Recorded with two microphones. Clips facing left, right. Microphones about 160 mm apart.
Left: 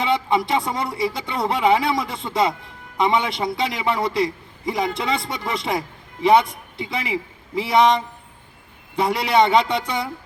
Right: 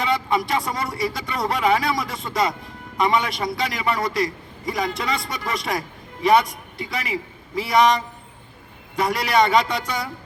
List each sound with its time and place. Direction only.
0.0 s a man's voice: 25° left (ahead or behind)